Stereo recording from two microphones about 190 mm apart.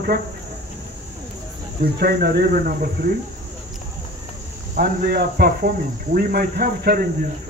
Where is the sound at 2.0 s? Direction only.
55° right (ahead or behind).